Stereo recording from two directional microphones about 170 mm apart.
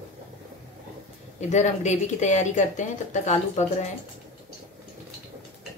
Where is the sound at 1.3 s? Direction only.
45° left (ahead or behind).